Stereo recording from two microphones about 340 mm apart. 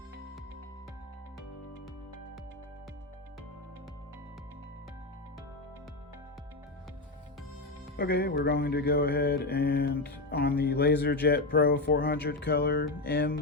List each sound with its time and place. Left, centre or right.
7.9 s speech: left